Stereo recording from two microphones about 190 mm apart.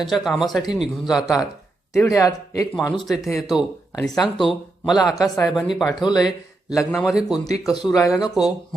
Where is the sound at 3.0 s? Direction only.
Centre (ahead or behind).